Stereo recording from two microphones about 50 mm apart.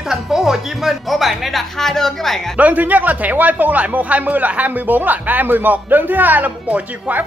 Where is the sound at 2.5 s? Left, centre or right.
Right.